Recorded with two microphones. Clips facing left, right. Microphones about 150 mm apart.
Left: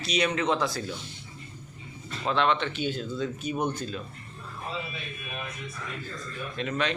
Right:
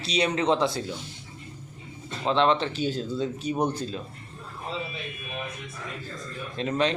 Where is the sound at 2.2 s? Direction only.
25° right (ahead or behind).